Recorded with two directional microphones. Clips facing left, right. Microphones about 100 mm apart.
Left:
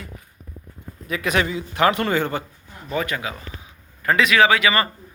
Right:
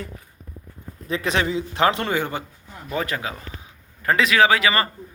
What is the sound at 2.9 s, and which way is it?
A man's voice, 35° right (ahead or behind).